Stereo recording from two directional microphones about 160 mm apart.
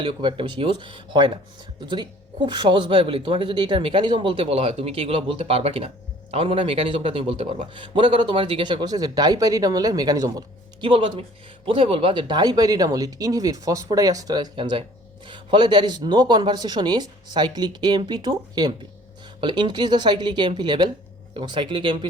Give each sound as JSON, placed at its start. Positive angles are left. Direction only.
{"t": 0.0, "sound": "a man's voice", "side_deg": -30}